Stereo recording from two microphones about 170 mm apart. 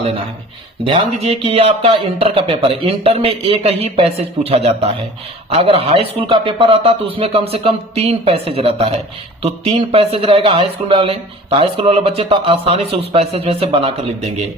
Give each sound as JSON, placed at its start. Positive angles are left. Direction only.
{"t": 0.9, "sound": "speech", "side_deg": -35}